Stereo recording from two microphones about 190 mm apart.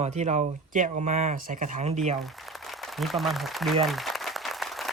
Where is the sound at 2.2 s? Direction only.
Centre (ahead or behind).